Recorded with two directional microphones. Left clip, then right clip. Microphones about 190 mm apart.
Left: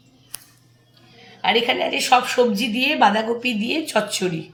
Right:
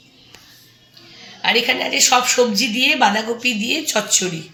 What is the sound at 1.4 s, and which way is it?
A woman's voice, 20° left (ahead or behind).